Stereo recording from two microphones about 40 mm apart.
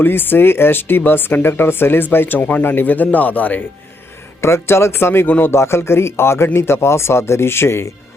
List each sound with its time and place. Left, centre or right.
0.0 s speech: left
4.4 s speech: left
5.4 s speech: left